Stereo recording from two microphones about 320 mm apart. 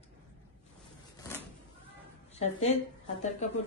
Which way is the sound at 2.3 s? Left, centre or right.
Centre.